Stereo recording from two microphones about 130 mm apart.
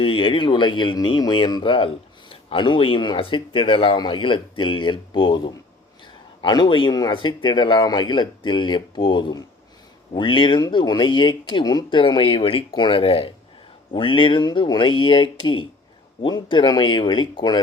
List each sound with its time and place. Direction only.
0.0 s speech: 40° left (ahead or behind)
6.4 s speech: 35° left (ahead or behind)